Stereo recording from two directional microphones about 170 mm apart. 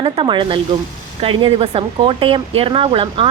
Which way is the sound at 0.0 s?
30° right (ahead or behind).